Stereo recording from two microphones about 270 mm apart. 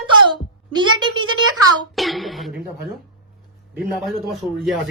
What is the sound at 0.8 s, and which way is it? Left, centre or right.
Speech, centre.